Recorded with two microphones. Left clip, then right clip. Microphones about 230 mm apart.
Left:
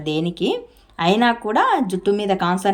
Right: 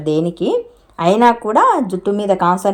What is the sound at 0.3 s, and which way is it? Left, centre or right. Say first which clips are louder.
A woman's voice: right 5 dB; right.